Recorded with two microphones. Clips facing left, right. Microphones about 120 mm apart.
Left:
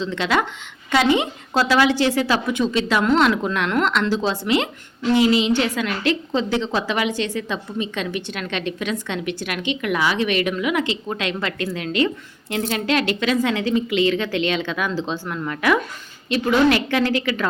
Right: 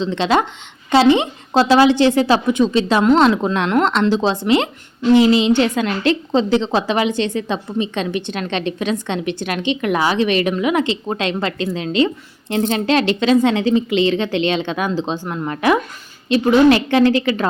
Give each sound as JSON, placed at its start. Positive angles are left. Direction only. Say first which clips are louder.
{"t": 0.0, "sound": "a woman's voice", "louder": "right 4 dB", "side_deg": -25}
{"t": 15.3, "sound": "a woman's voice", "louder": "right 3 dB", "side_deg": -30}